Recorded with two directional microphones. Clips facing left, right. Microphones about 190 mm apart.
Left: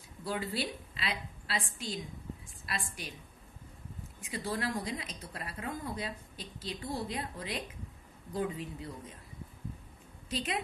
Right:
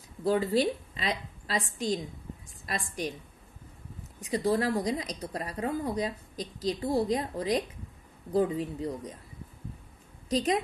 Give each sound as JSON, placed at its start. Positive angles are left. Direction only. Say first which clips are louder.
{"t": 0.2, "sound": "a woman's voice", "louder": "right 10 dB", "side_deg": -40}
{"t": 4.2, "sound": "a woman's voice", "louder": "right 9 dB", "side_deg": -40}
{"t": 10.3, "sound": "a woman's voice", "louder": "right 9 dB", "side_deg": -40}